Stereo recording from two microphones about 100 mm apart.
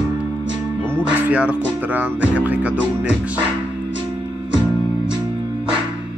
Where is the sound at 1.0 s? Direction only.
10° right (ahead or behind).